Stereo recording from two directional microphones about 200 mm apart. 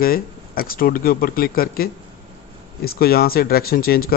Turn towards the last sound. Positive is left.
turn(degrees=50)  # may be behind; listen again after turning